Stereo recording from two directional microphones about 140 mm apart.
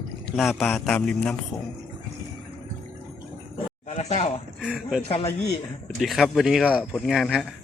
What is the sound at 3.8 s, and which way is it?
Speech, 55° left (ahead or behind).